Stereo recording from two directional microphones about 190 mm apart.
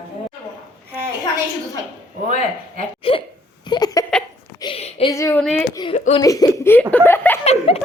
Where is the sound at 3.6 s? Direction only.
20° left (ahead or behind).